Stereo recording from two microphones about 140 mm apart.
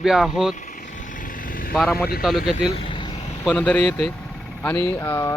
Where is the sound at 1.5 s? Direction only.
90° left.